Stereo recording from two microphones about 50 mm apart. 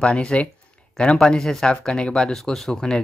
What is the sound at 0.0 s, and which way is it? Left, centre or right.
Speech, centre.